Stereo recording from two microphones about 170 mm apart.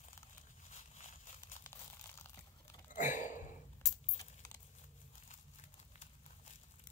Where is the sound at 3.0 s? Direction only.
50° left (ahead or behind).